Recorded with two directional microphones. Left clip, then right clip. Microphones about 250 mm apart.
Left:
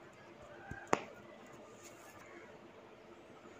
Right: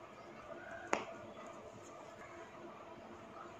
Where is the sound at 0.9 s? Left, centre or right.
Left.